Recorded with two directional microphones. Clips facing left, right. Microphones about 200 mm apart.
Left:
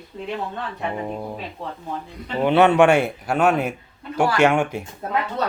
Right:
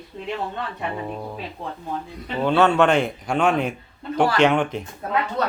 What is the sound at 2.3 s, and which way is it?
Speech, 15° left (ahead or behind).